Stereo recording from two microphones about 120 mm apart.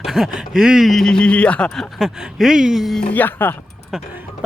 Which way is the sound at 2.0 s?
5° right (ahead or behind).